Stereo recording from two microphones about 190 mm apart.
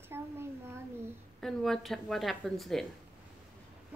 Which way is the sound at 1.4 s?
Centre (ahead or behind).